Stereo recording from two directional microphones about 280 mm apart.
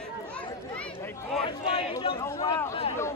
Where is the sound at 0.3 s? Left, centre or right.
Centre.